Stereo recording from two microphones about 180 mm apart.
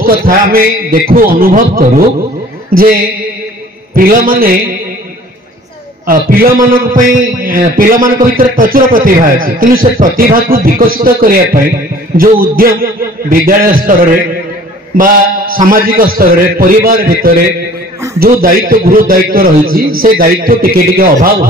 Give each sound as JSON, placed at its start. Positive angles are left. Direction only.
{"t": 0.0, "sound": "a man's voice", "side_deg": -55}
{"t": 3.9, "sound": "a man's voice", "side_deg": -50}
{"t": 6.0, "sound": "a man's voice", "side_deg": -50}